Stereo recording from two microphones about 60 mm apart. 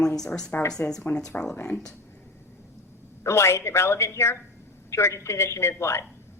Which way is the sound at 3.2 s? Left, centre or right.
Left.